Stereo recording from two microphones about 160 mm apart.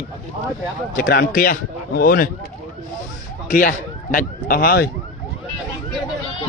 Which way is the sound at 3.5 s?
60° left (ahead or behind).